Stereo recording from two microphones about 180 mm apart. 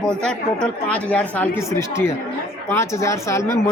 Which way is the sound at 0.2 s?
5° left (ahead or behind).